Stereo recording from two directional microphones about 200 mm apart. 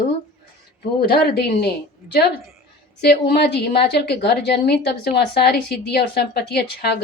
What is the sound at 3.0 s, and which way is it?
A woman's voice, 55° left (ahead or behind).